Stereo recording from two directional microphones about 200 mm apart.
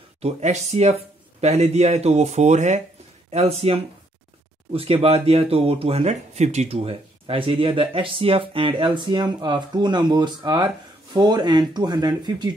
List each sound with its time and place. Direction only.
0.2 s speech: 35° right (ahead or behind)